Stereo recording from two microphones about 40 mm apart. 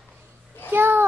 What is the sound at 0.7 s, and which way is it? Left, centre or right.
Speech, right.